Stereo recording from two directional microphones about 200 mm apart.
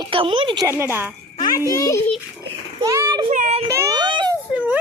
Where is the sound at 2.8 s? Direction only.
15° right (ahead or behind).